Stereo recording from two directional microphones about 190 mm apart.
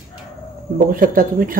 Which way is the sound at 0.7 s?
45° right (ahead or behind).